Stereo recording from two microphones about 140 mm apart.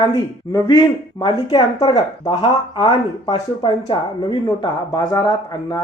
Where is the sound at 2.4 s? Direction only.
45° left (ahead or behind).